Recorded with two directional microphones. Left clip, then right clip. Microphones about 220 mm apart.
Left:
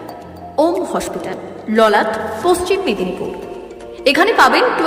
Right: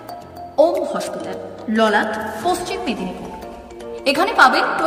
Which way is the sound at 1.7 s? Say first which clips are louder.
Left 4 dB; 20° left (ahead or behind).